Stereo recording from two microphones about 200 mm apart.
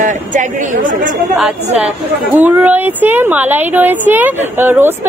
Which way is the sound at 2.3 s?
10° right (ahead or behind).